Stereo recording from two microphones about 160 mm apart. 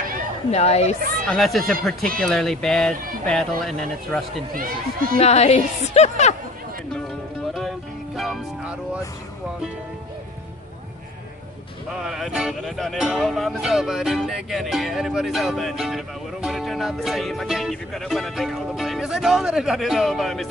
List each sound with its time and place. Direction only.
0.5 s speech: 40° left (ahead or behind)
1.3 s music: centre (ahead or behind)
5.1 s a woman's voice: 40° left (ahead or behind)
6.9 s music: centre (ahead or behind)
11.9 s music: 5° right (ahead or behind)